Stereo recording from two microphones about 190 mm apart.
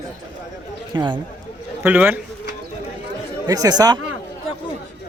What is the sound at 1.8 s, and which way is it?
Speech, 10° right (ahead or behind).